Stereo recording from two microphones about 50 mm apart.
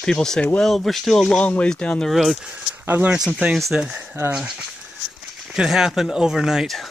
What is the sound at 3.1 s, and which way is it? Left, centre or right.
Speech, centre.